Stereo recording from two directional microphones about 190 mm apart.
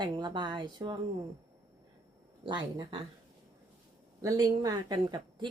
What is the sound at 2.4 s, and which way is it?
Speech, 25° right (ahead or behind).